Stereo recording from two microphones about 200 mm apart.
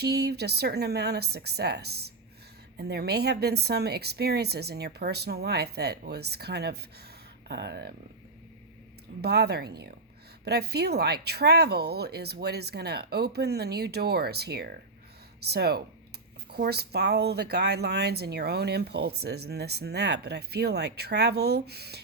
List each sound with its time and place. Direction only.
0.0 s speech: 55° right (ahead or behind)
9.2 s speech: 55° right (ahead or behind)